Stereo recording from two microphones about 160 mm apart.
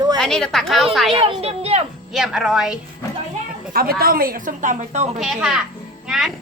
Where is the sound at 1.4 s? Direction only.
40° right (ahead or behind).